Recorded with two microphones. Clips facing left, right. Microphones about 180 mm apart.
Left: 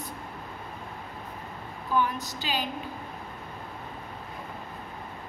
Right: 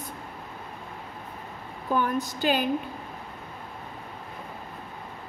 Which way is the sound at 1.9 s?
50° right (ahead or behind).